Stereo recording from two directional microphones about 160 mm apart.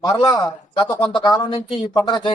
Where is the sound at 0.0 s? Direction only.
25° left (ahead or behind).